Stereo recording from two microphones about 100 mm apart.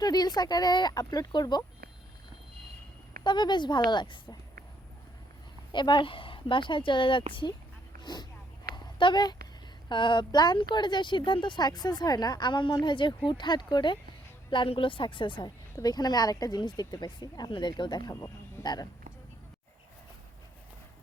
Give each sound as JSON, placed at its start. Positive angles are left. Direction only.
{"t": 0.0, "sound": "speech", "side_deg": 40}
{"t": 3.2, "sound": "speech", "side_deg": 50}
{"t": 5.7, "sound": "a woman's voice", "side_deg": 50}
{"t": 8.0, "sound": "speech", "side_deg": 45}
{"t": 8.7, "sound": "a sound", "side_deg": 50}
{"t": 9.9, "sound": "a woman's voice", "side_deg": 50}
{"t": 15.7, "sound": "speech", "side_deg": 40}
{"t": 18.1, "sound": "speech", "side_deg": 30}
{"t": 18.6, "sound": "speech", "side_deg": 45}